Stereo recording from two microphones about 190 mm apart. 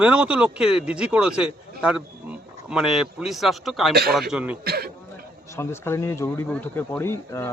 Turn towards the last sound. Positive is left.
turn(degrees=15)  # may be behind; listen again after turning